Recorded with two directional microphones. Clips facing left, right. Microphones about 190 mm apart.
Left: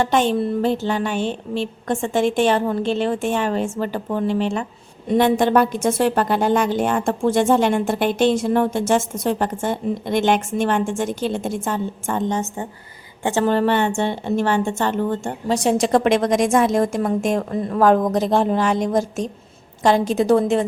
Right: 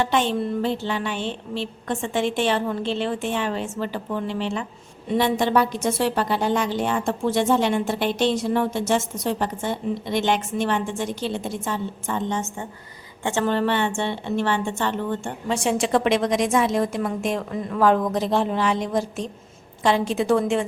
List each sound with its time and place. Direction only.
0.0 s a woman's voice: 45° left (ahead or behind)